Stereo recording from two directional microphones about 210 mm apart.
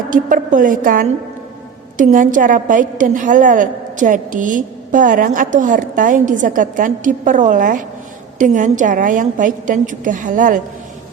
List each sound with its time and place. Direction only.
0.1 s a woman's voice: 40° right (ahead or behind)